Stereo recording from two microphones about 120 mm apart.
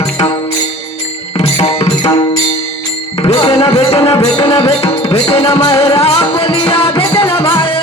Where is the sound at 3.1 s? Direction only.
55° left (ahead or behind).